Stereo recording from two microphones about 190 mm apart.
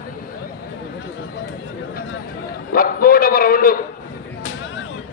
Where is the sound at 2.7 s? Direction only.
50° left (ahead or behind).